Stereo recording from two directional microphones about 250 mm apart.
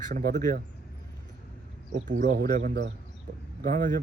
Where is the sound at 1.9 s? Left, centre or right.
Right.